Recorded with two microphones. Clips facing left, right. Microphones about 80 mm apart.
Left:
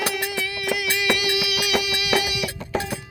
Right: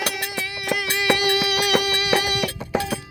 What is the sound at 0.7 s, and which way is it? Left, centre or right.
Music, right.